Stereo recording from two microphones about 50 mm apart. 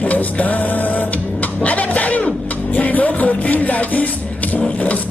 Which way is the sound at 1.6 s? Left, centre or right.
Left.